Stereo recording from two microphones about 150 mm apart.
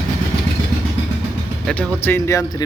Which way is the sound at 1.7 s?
5° left (ahead or behind).